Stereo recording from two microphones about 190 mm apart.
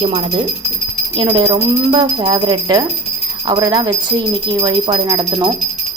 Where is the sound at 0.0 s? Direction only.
30° right (ahead or behind).